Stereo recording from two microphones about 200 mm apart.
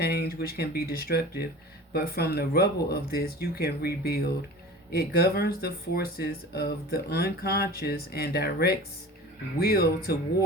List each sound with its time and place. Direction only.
0.0 s speech: 50° left (ahead or behind)